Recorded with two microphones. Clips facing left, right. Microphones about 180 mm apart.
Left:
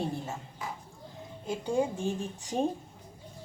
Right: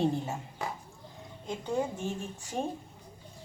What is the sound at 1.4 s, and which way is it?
A woman's voice, 10° left (ahead or behind).